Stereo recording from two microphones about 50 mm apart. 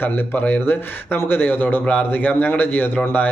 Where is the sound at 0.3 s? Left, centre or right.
Left.